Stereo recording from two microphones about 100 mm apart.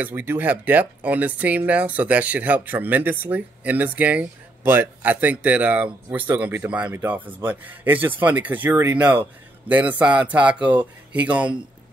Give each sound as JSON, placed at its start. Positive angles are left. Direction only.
{"t": 0.0, "sound": "speech", "side_deg": -20}